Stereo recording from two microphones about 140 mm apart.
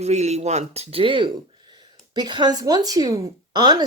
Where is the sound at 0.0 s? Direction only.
50° right (ahead or behind).